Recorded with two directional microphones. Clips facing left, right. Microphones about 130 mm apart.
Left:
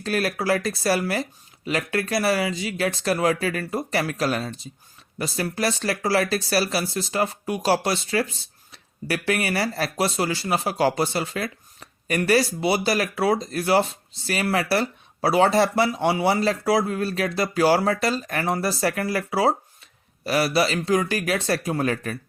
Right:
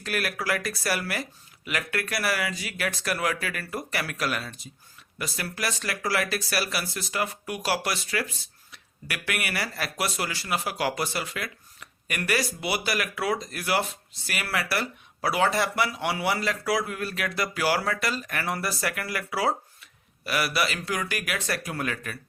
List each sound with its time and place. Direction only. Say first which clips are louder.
0.0 s speech: left 6 dB; 30° left (ahead or behind)